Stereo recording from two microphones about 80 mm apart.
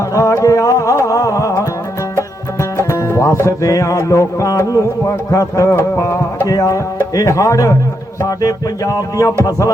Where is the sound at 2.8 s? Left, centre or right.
Left.